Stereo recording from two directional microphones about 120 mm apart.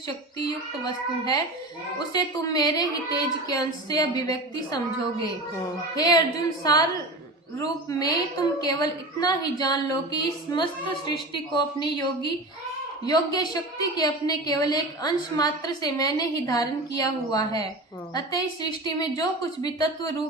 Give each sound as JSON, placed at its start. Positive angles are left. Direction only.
{"t": 1.2, "sound": "a woman's voice", "side_deg": 30}
{"t": 6.0, "sound": "a woman's voice", "side_deg": 35}
{"t": 7.9, "sound": "a woman's voice", "side_deg": 30}